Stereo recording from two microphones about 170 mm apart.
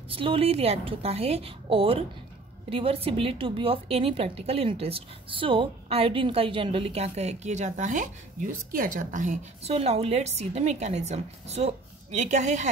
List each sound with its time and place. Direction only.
0.1 s a woman's voice: 35° right (ahead or behind)